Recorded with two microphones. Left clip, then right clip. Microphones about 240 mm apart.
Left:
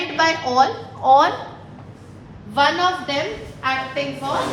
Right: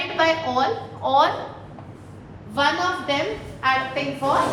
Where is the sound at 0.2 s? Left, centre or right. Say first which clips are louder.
Left 2 dB; left.